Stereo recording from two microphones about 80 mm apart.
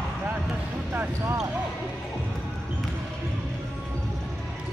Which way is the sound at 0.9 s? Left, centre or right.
Right.